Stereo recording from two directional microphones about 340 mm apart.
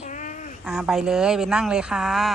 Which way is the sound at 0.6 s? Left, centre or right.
Centre.